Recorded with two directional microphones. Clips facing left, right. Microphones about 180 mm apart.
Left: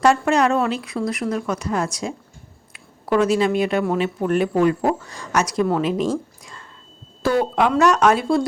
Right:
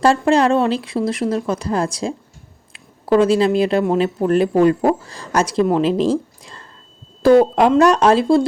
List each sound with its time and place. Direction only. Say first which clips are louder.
0.0 s a woman's voice: right 3 dB; 30° right (ahead or behind)